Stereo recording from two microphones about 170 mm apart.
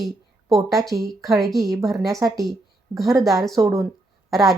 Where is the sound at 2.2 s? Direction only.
15° right (ahead or behind).